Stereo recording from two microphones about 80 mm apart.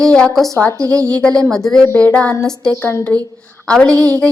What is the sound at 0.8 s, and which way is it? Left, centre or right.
Speech, right.